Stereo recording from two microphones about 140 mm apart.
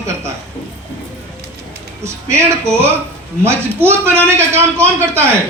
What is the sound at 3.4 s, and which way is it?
A man's voice, 20° right (ahead or behind).